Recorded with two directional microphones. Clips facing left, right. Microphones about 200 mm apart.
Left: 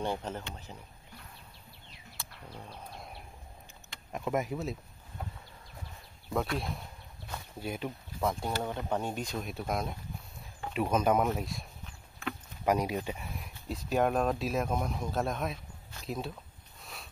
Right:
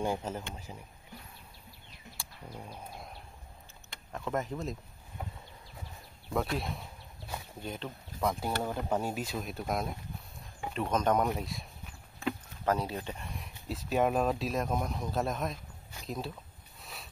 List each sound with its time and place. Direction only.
0.0 s speech: 10° right (ahead or behind)
2.1 s a sound: 10° right (ahead or behind)
4.1 s speech: 10° left (ahead or behind)
6.6 s a sound: centre (ahead or behind)
7.6 s speech: 10° left (ahead or behind)
12.6 s speech: 15° left (ahead or behind)
16.8 s sniff: centre (ahead or behind)